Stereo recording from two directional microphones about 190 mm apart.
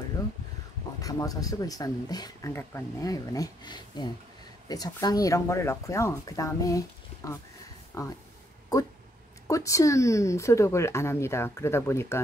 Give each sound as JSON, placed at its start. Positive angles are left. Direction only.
{"t": 1.0, "sound": "speech", "side_deg": 20}
{"t": 7.9, "sound": "speech", "side_deg": 15}
{"t": 8.7, "sound": "a sound", "side_deg": 20}
{"t": 9.5, "sound": "speech", "side_deg": 15}